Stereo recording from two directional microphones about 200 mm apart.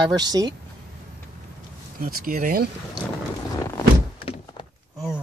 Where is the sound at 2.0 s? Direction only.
45° right (ahead or behind).